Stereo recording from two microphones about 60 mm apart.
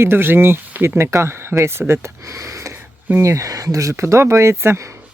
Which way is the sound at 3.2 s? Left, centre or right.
Right.